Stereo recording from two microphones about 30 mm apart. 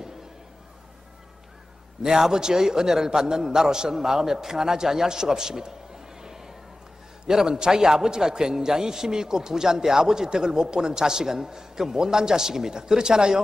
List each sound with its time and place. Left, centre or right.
2.0 s a man's voice: centre
6.2 s a sound: centre
7.2 s a man's voice: right